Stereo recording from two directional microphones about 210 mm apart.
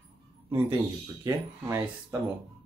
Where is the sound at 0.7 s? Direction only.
15° right (ahead or behind).